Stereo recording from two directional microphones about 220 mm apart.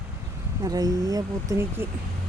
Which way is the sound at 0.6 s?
15° right (ahead or behind).